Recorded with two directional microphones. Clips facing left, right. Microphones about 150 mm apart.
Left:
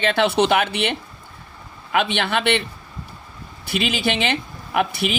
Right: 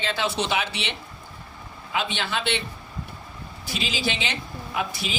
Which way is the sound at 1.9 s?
65° left (ahead or behind).